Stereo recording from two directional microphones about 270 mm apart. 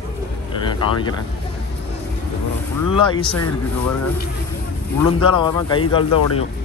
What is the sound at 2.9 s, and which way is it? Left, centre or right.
Speech, centre.